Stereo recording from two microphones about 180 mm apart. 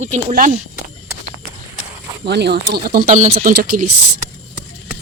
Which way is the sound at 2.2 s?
70° right (ahead or behind).